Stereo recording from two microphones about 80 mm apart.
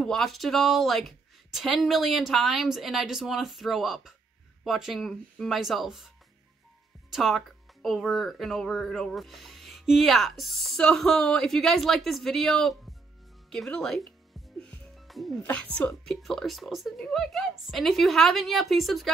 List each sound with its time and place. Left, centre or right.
0.0 s speech: centre
15.0 s music: centre
15.4 s speech: centre
16.1 s speech: centre